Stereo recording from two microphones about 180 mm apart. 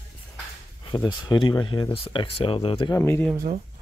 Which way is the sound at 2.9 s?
10° left (ahead or behind).